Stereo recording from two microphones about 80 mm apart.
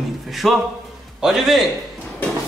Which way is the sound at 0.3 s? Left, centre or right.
Centre.